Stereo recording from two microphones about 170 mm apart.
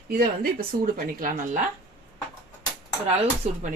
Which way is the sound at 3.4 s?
40° right (ahead or behind).